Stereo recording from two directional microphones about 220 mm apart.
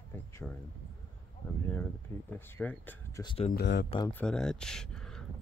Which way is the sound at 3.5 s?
50° left (ahead or behind).